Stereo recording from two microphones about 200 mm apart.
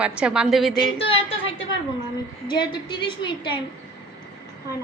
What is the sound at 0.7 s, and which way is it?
A woman's voice, 30° left (ahead or behind).